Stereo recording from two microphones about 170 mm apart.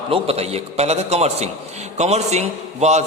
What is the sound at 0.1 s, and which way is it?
Speech, 35° right (ahead or behind).